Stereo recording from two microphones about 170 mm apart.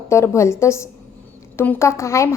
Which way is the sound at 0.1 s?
15° left (ahead or behind).